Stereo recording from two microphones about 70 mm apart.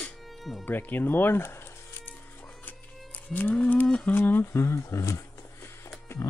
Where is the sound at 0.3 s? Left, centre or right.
Centre.